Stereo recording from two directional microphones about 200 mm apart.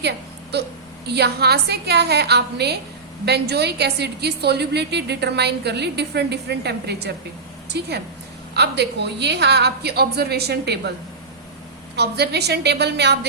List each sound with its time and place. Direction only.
1.0 s a woman's voice: 55° right (ahead or behind)
11.9 s a woman's voice: 55° right (ahead or behind)